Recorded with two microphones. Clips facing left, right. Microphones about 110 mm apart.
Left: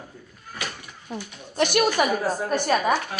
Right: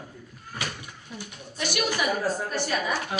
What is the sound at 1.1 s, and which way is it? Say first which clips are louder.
Speech: left 7 dB; 55° left (ahead or behind).